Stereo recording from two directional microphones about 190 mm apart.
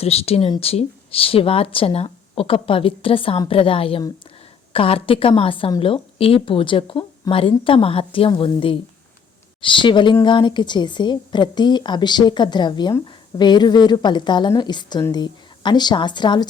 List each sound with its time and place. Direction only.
0.0 s a woman's voice: 30° left (ahead or behind)